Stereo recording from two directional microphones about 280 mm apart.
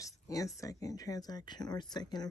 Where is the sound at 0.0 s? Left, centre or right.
Centre.